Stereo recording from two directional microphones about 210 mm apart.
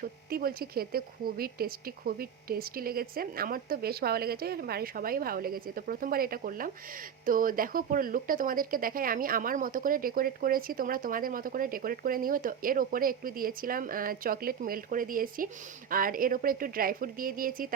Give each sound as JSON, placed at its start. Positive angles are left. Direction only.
{"t": 0.0, "sound": "speech", "side_deg": -45}